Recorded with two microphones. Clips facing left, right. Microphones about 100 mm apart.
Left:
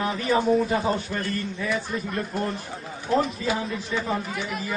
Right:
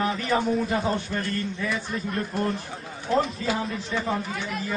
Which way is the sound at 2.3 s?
Centre (ahead or behind).